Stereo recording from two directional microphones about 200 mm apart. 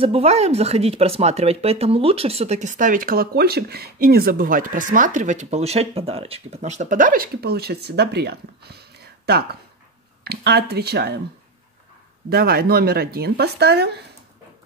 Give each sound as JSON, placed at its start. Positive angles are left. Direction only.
{"t": 0.0, "sound": "speech", "side_deg": -30}
{"t": 12.3, "sound": "speech", "side_deg": -50}